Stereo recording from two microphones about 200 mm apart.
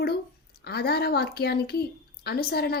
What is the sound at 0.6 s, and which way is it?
Speech, 50° left (ahead or behind).